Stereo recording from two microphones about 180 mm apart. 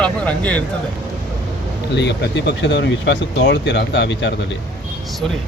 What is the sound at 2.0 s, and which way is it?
Speech, 70° left (ahead or behind).